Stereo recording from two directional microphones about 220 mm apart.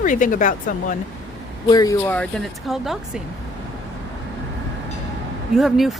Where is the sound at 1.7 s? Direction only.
15° left (ahead or behind); by 3.2 s centre (ahead or behind).